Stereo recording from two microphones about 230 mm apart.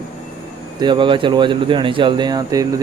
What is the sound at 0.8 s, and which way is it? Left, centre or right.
Speech, centre.